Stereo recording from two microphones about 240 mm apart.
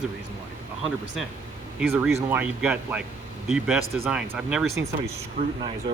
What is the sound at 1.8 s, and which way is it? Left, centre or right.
Speech, centre.